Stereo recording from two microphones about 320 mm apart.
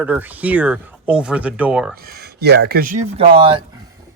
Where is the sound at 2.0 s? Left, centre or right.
Right.